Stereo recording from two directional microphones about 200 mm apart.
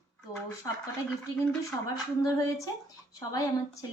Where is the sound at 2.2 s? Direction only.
15° left (ahead or behind).